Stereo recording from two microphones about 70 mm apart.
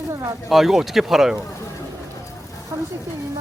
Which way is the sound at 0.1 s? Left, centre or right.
Right.